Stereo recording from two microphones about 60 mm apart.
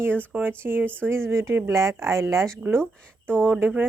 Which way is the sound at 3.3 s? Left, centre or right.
Right.